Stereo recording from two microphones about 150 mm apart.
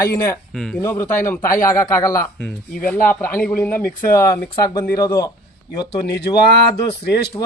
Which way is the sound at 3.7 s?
70° left (ahead or behind).